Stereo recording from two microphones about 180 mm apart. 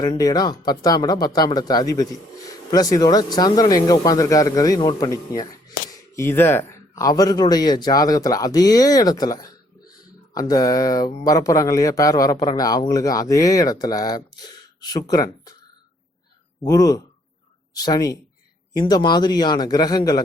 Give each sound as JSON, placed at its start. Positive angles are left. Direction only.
{"t": 0.0, "sound": "a man's voice", "side_deg": 20}
{"t": 16.6, "sound": "a man's voice", "side_deg": 20}